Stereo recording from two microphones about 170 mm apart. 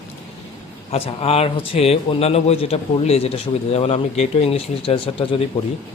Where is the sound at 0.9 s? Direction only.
35° left (ahead or behind).